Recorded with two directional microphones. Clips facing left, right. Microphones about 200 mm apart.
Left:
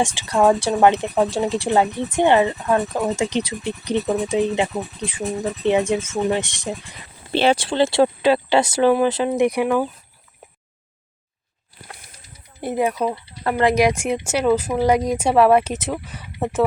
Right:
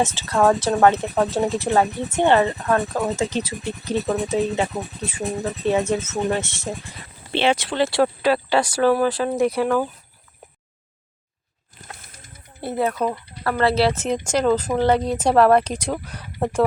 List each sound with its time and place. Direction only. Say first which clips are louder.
0.0 s speech: left 1 dB; 15° left (ahead or behind)
7.3 s speech: left 3 dB; 35° left (ahead or behind); by 9.8 s 15° left (ahead or behind)
12.6 s speech: left 1 dB; 15° left (ahead or behind)